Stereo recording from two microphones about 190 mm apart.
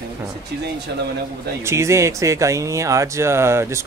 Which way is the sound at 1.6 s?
15° right (ahead or behind).